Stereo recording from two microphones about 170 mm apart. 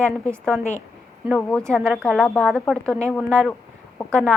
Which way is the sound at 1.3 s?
5° left (ahead or behind).